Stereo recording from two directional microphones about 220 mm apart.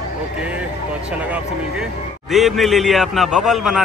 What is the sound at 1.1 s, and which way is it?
A man's voice, 5° right (ahead or behind).